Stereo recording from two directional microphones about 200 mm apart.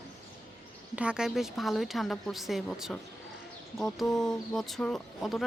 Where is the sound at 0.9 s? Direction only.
5° right (ahead or behind).